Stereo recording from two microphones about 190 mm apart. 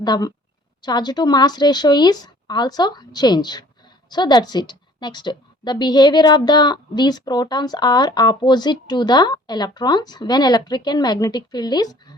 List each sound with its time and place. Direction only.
0.0 s a woman's voice: 20° left (ahead or behind)